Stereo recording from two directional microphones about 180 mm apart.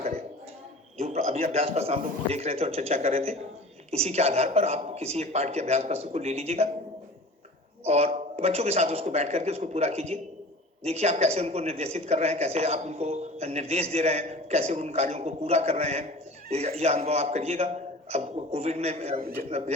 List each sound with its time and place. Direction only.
0.9 s a man's voice: 35° right (ahead or behind)
7.9 s a man's voice: 35° right (ahead or behind)